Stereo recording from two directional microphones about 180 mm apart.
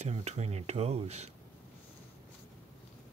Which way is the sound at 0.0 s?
35° right (ahead or behind).